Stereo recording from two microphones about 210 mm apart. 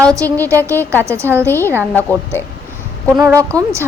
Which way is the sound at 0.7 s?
10° left (ahead or behind).